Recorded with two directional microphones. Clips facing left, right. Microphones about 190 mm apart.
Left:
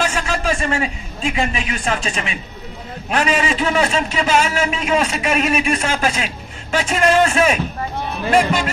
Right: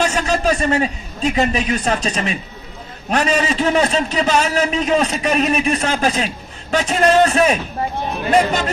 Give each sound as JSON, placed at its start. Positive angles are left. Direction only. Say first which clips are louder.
{"t": 0.0, "sound": "a man's voice", "louder": "right 3 dB", "side_deg": -40}